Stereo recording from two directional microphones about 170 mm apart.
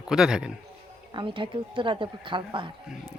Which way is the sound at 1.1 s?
30° right (ahead or behind).